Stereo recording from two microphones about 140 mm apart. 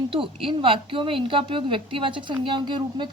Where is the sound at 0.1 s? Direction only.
40° right (ahead or behind).